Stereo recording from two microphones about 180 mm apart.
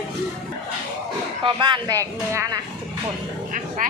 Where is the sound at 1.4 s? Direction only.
25° right (ahead or behind).